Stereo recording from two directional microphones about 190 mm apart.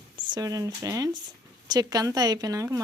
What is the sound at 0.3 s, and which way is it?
Speech, 20° right (ahead or behind).